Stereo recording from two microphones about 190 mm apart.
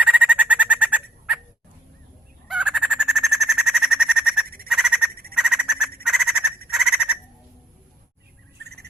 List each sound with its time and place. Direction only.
0.0 s bird: 5° right (ahead or behind)
2.5 s bird: 5° right (ahead or behind)
4.4 s frog: 50° right (ahead or behind)
4.7 s frog: 5° right (ahead or behind)
5.3 s bird: 5° right (ahead or behind)
6.7 s a sound: 5° right (ahead or behind)
8.6 s bird: 60° right (ahead or behind)